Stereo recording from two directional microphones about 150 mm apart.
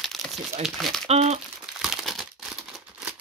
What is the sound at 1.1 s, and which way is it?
Speech, 45° right (ahead or behind).